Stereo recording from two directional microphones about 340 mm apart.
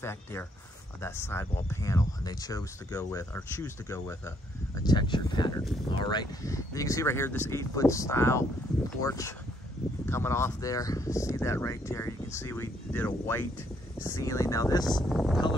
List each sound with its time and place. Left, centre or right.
0.0 s speech: centre
15.0 s speech: centre